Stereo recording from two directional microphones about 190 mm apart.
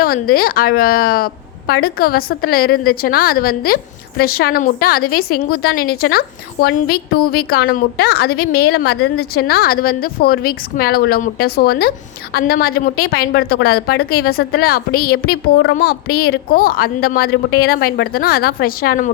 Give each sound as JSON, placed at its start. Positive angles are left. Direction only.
{"t": 0.0, "sound": "a woman's voice", "side_deg": 50}